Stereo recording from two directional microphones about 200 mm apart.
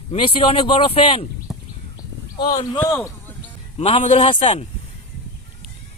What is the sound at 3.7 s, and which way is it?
Speech, 30° left (ahead or behind).